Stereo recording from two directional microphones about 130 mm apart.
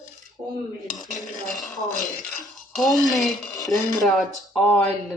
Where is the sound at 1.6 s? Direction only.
Centre (ahead or behind).